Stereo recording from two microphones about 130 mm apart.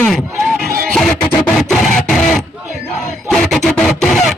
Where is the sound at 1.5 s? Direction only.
5° left (ahead or behind).